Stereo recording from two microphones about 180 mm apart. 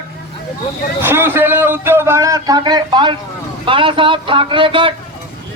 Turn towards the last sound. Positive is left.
turn(degrees=-30)  # may be behind; listen again after turning